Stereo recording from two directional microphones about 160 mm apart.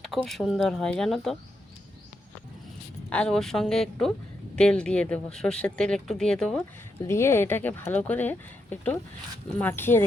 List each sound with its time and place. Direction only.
0.2 s speech: centre (ahead or behind)
3.1 s speech: 5° left (ahead or behind)
7.0 s speech: 15° left (ahead or behind)